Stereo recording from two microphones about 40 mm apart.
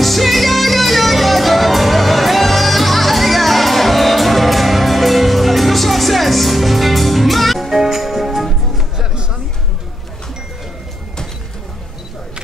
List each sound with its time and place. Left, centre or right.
0.0 s music: centre
8.9 s music: right